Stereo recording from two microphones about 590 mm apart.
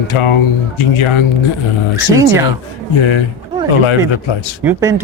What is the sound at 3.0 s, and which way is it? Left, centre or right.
Speech, left.